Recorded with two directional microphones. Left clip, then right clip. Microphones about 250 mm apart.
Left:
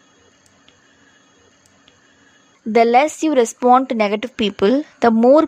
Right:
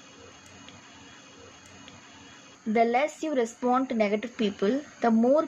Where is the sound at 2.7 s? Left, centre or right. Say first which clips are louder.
Left 11 dB; left.